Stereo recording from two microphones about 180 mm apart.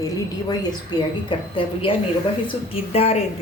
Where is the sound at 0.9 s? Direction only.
20° left (ahead or behind).